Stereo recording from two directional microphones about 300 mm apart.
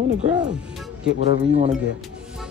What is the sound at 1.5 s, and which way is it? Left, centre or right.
Speech, centre.